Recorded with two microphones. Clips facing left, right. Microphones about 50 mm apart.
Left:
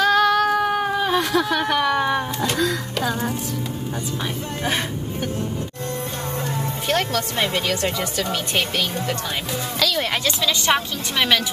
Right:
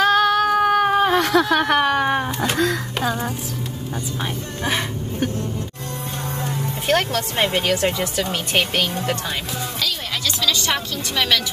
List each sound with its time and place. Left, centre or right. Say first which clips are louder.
0.0 s a sound: right 1 dB; right
0.6 s cat: right 4 dB; right
2.1 s speech: right 1 dB; right
3.0 s speech: even; centre
6.9 s speech: right 3 dB; right
9.8 s speech: left 6 dB; left
10.2 s a woman's voice: right 3 dB; left